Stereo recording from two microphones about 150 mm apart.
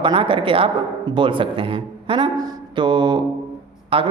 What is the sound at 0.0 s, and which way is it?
A woman's voice, 35° right (ahead or behind).